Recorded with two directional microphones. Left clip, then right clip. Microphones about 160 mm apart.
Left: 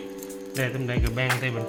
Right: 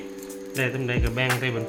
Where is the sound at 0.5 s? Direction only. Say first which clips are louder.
Right 3 dB; 20° right (ahead or behind).